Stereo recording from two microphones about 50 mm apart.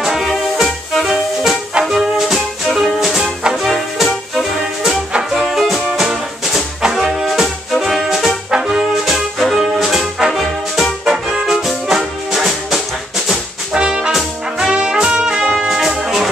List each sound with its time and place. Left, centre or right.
0.0 s music: centre
13.7 s brass instrument: centre